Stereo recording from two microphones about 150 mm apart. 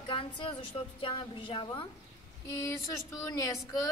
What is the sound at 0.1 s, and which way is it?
A woman's voice, 35° left (ahead or behind).